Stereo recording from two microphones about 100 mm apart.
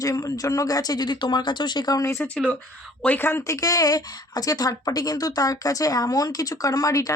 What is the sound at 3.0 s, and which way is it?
Speech, 20° left (ahead or behind).